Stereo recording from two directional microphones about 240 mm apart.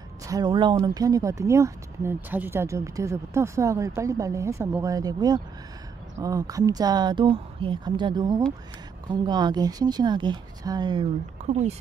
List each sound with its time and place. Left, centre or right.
0.3 s speech: centre